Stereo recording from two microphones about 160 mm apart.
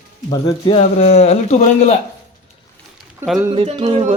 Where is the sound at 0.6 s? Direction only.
40° left (ahead or behind).